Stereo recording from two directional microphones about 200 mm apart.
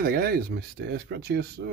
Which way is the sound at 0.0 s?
50° right (ahead or behind).